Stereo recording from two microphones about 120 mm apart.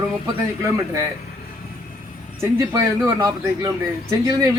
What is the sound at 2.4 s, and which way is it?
Speech, 25° right (ahead or behind).